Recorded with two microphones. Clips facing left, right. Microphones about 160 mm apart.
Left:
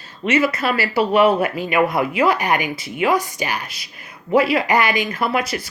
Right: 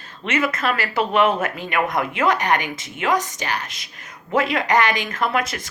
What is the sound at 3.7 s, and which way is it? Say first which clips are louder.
Speech: left 1 dB; 45° right (ahead or behind).